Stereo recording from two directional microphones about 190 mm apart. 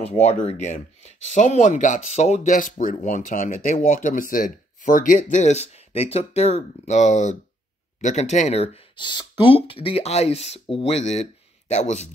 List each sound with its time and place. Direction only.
0.5 s speech: 40° left (ahead or behind)